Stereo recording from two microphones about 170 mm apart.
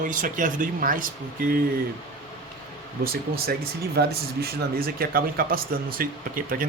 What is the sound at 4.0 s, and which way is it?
Speech, 65° right (ahead or behind).